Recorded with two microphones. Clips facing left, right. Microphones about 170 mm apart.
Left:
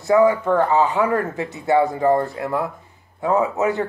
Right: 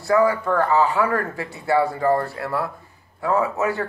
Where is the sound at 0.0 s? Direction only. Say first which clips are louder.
Left 3 dB; 20° left (ahead or behind).